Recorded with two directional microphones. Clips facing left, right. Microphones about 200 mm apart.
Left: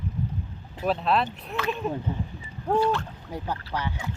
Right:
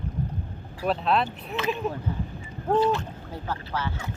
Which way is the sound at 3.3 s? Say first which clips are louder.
Left 1 dB; 15° left (ahead or behind).